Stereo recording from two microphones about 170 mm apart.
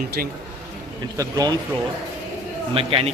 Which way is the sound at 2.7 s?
35° right (ahead or behind).